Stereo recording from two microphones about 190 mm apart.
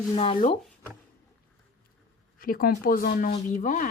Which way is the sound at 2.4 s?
50° left (ahead or behind).